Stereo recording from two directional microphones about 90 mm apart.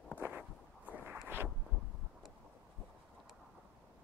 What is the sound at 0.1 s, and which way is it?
Walk, 20° right (ahead or behind).